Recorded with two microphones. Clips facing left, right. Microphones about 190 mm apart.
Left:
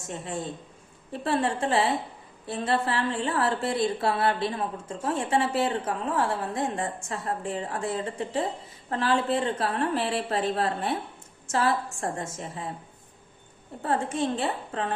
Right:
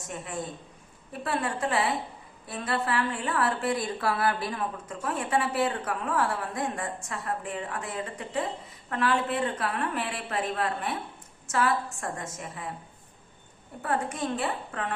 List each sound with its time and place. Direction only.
0.1 s a woman's voice: 25° left (ahead or behind)
13.8 s speech: 25° left (ahead or behind)